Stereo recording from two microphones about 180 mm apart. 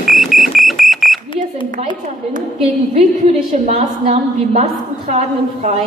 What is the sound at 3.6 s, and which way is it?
A woman's voice, 35° right (ahead or behind).